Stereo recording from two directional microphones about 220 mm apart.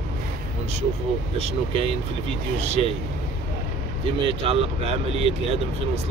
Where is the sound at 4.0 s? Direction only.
25° right (ahead or behind).